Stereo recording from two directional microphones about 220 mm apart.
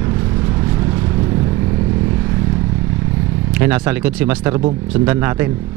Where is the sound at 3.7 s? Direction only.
10° right (ahead or behind).